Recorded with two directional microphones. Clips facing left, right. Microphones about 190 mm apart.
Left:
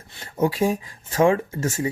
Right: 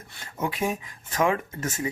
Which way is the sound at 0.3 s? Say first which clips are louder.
Left 7 dB; 30° left (ahead or behind).